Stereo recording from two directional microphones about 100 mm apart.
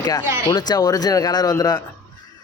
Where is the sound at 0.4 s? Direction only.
40° left (ahead or behind).